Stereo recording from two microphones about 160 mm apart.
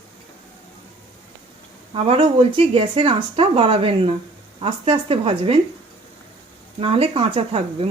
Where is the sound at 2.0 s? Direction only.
35° right (ahead or behind).